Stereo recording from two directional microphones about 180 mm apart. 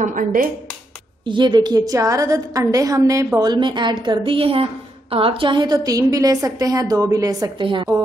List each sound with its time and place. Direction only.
0.0 s speech: 50° right (ahead or behind)
1.2 s a woman's voice: 25° right (ahead or behind)